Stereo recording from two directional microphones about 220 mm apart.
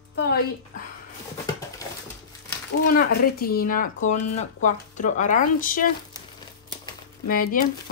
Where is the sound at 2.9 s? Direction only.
40° left (ahead or behind).